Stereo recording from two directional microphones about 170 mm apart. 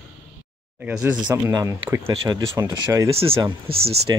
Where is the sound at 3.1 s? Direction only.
35° right (ahead or behind).